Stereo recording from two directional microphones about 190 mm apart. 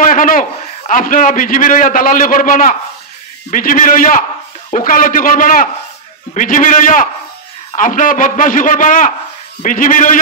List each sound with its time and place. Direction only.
0.0 s a man's voice: 45° left (ahead or behind)